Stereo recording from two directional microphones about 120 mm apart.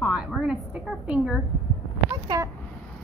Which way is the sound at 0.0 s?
5° right (ahead or behind).